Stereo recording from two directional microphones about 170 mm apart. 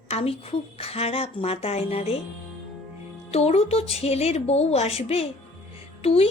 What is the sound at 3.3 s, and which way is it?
Speech, 40° left (ahead or behind).